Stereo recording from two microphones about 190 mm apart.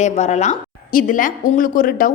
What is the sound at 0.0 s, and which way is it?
Speech, 35° left (ahead or behind).